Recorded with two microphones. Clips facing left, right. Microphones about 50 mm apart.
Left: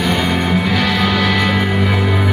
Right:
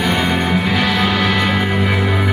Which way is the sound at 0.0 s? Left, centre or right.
Centre.